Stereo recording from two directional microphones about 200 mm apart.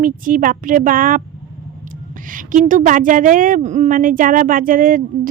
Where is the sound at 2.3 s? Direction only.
40° right (ahead or behind).